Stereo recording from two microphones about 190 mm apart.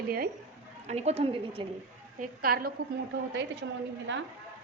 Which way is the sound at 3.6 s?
90° right.